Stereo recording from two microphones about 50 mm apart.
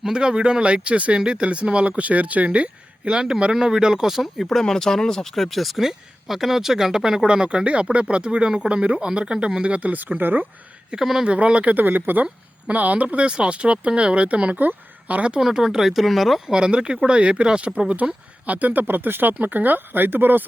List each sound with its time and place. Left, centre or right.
0.0 s speech: centre
4.4 s speech: centre
7.3 s speech: centre; by 10.4 s right
10.9 s speech: centre
11.3 s a woman's voice: right
15.4 s speech: centre
16.5 s speech: centre; by 20.4 s right